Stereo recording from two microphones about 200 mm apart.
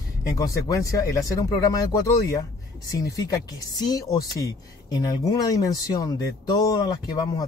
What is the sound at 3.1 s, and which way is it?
Speech, 15° left (ahead or behind).